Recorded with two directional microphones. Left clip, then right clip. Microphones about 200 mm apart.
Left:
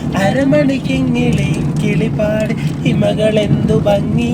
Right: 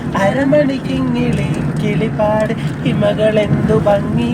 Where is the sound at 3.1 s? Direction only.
15° left (ahead or behind).